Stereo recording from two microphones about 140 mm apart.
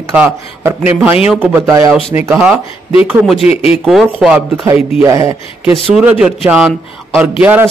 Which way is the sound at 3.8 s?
Centre (ahead or behind).